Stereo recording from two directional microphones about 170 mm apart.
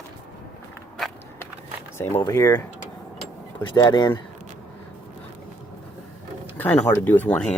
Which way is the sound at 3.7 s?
25° left (ahead or behind).